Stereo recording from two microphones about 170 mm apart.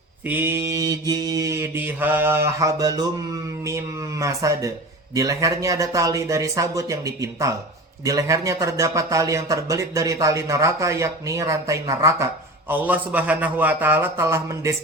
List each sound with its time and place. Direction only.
0.3 s speech: 10° right (ahead or behind)